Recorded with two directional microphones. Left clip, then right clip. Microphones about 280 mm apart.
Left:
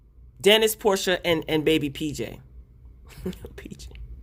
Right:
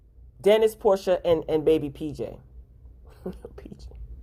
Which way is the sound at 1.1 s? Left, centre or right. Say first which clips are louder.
Right 1 dB; left.